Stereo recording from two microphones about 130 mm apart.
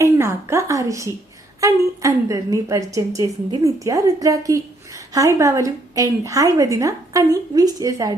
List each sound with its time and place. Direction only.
0.0 s a woman's voice: 20° right (ahead or behind)